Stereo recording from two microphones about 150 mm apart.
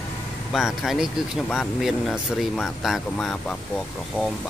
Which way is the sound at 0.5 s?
Centre (ahead or behind).